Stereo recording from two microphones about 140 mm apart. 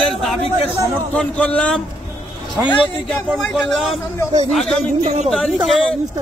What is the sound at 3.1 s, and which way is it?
A man's voice, centre (ahead or behind).